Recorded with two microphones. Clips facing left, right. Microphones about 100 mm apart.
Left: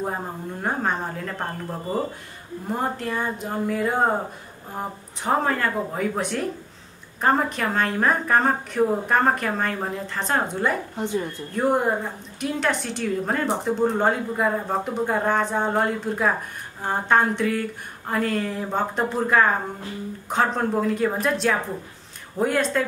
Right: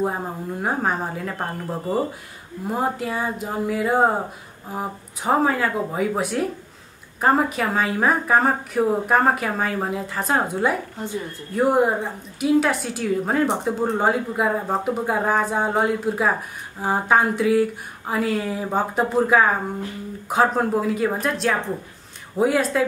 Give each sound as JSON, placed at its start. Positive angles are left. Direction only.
{"t": 0.0, "sound": "a woman's voice", "side_deg": -5}